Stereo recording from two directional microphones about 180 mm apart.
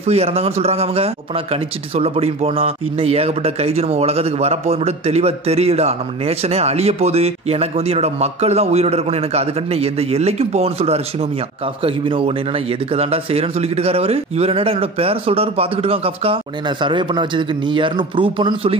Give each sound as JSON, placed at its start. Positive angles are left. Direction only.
{"t": 0.0, "sound": "speech", "side_deg": -35}